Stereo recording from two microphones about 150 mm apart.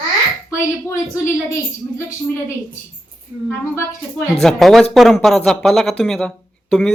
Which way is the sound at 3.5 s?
15° left (ahead or behind).